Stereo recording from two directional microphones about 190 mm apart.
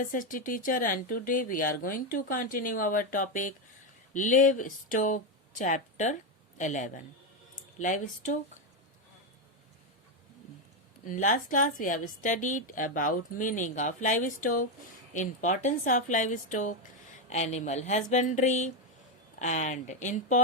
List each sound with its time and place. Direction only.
0.0 s a woman's voice: 45° left (ahead or behind)
11.0 s a woman's voice: 40° left (ahead or behind)